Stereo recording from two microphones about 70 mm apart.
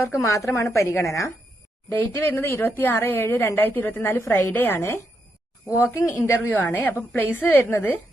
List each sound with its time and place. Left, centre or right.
0.0 s a woman's voice: left
1.9 s a woman's voice: left
5.6 s a woman's voice: left
6.1 s a woman's voice: left